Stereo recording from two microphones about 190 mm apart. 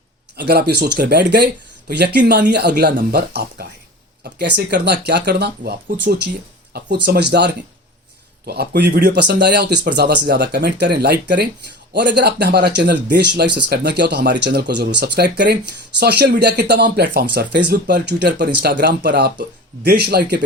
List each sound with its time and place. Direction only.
0.3 s speech: 60° right (ahead or behind)